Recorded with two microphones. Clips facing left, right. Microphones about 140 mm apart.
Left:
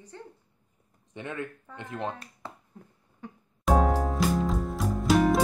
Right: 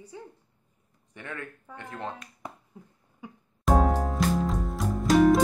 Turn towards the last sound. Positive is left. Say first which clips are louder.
# right 3 dB
turn(degrees=0)  # may be behind; listen again after turning